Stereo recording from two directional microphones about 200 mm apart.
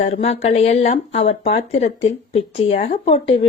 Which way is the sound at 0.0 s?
30° left (ahead or behind).